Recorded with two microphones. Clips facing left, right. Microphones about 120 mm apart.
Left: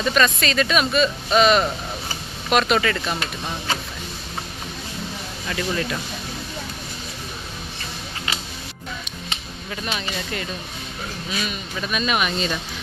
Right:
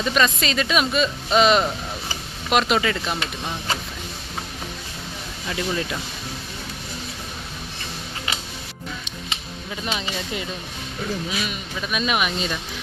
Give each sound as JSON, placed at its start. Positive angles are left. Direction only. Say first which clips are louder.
{"t": 0.0, "sound": "speech", "louder": "left 1 dB", "side_deg": -20}
{"t": 5.5, "sound": "speech", "louder": "left 1 dB", "side_deg": -15}
{"t": 9.8, "sound": "speech", "louder": "right 1 dB", "side_deg": -20}